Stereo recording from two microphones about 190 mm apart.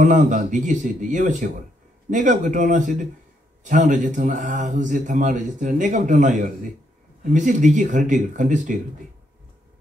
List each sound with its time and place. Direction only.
0.0 s speech: 40° right (ahead or behind)